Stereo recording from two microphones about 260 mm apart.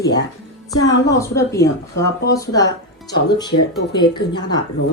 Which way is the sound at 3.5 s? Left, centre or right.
Left.